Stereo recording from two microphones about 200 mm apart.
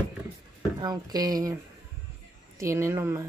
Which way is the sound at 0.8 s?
20° right (ahead or behind).